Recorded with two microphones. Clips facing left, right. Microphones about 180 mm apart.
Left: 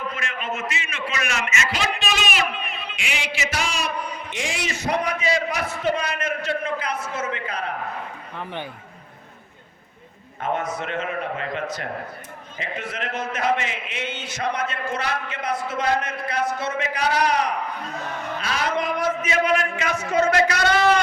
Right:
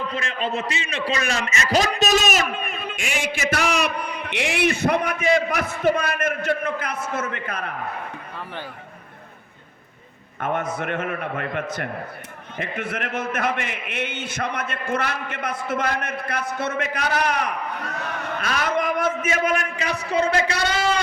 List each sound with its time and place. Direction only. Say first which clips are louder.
0.0 s a man's voice: right 4 dB; 30° right (ahead or behind); by 7.6 s 50° right (ahead or behind)
10.4 s a man's voice: right 1 dB; 55° right (ahead or behind); by 20.6 s 30° right (ahead or behind)